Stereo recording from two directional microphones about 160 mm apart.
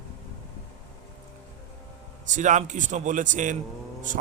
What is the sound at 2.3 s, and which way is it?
A man's voice, 50° right (ahead or behind).